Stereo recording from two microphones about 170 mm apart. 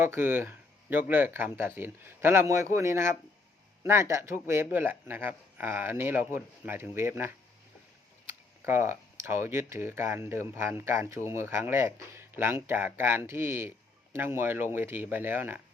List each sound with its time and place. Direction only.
0.0 s speech: 10° right (ahead or behind)
8.6 s speech: 15° right (ahead or behind)